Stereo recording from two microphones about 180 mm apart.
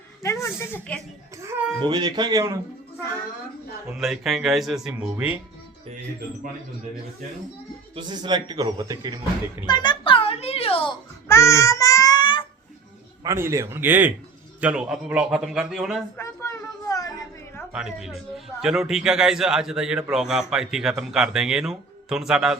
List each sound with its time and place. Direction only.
0.2 s a woman's voice: 15° left (ahead or behind)
1.4 s a child's voice: 15° right (ahead or behind)
3.9 s a man's voice: centre (ahead or behind)
7.9 s speech: 25° right (ahead or behind)
9.6 s a sound: 25° left (ahead or behind)
11.3 s babbling: 15° left (ahead or behind)
13.2 s a man's voice: 15° right (ahead or behind)
16.1 s a sound: 15° left (ahead or behind)
17.7 s a man's voice: 5° right (ahead or behind)